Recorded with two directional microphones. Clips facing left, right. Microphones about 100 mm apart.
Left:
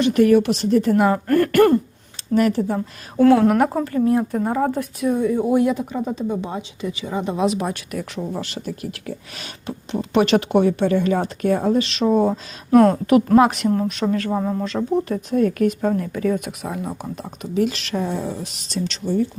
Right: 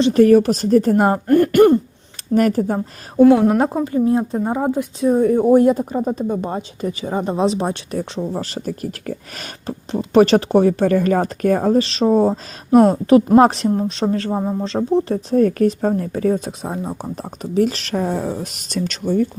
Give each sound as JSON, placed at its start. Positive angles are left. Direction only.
{"t": 0.0, "sound": "speech", "side_deg": -35}
{"t": 1.3, "sound": "speech", "side_deg": -20}
{"t": 2.3, "sound": "speech", "side_deg": -45}
{"t": 3.2, "sound": "speech", "side_deg": -10}
{"t": 5.0, "sound": "speech", "side_deg": -45}
{"t": 12.7, "sound": "speech", "side_deg": -20}
{"t": 13.3, "sound": "speech", "side_deg": -30}